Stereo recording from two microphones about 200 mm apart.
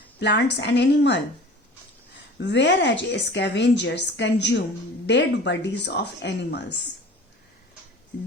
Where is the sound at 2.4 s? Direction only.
60° left (ahead or behind).